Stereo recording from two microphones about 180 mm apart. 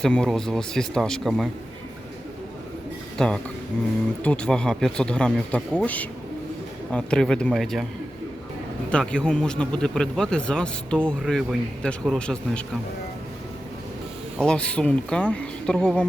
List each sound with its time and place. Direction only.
0.0 s a man's voice: 5° left (ahead or behind)
3.2 s a man's voice: 5° left (ahead or behind)
8.9 s a man's voice: 5° left (ahead or behind)
14.3 s a man's voice: 5° left (ahead or behind)